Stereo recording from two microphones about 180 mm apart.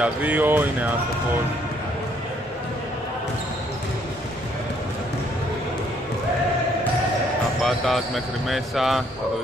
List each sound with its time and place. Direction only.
0.0 s speech: 10° right (ahead or behind)
7.6 s speech: centre (ahead or behind)